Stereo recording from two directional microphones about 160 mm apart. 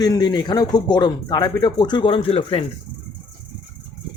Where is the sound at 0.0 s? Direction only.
25° left (ahead or behind).